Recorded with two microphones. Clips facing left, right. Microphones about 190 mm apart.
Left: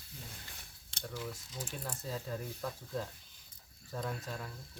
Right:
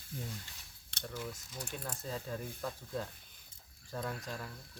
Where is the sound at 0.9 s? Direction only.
65° right (ahead or behind).